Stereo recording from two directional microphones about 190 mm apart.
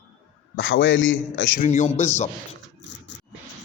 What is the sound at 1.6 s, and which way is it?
Speech, 40° left (ahead or behind).